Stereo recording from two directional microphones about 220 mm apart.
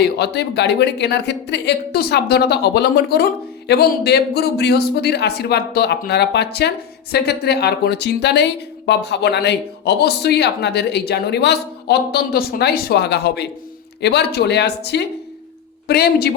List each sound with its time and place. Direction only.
0.0 s speech: 50° left (ahead or behind)